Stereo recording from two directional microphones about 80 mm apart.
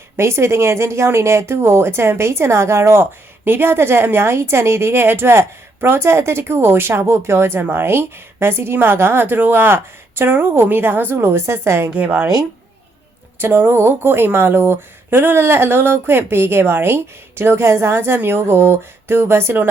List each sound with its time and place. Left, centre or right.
0.2 s speech: right
11.9 s speech: centre
13.4 s speech: right